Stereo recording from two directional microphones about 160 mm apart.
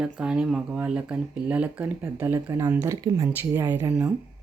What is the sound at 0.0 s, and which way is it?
Speech, 5° right (ahead or behind).